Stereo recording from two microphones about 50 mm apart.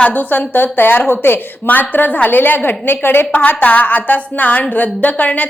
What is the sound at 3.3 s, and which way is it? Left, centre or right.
A woman's voice, left.